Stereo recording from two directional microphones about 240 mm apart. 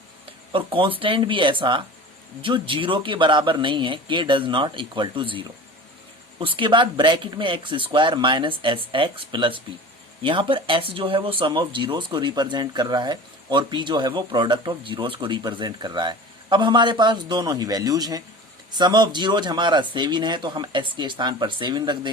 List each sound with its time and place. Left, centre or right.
0.5 s speech: right